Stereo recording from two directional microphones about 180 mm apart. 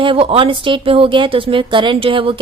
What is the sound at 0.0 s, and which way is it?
A woman's voice, 30° right (ahead or behind).